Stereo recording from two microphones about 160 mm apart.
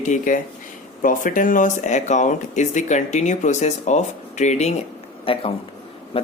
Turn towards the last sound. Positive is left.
turn(degrees=35)  # may be behind; listen again after turning